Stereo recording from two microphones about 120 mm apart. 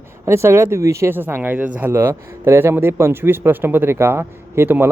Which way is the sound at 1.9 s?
20° right (ahead or behind).